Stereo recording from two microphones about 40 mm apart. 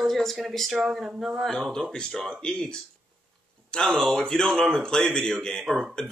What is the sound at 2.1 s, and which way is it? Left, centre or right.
Speech, centre.